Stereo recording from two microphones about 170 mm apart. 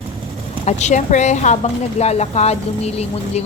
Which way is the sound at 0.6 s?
45° left (ahead or behind).